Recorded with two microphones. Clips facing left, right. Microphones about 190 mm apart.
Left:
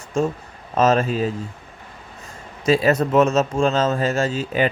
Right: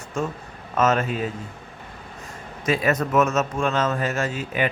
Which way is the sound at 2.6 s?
30° left (ahead or behind).